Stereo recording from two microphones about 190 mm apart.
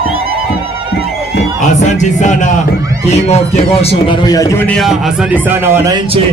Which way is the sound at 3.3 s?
35° left (ahead or behind).